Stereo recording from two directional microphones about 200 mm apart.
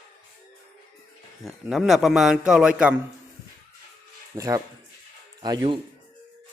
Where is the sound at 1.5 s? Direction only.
Centre (ahead or behind).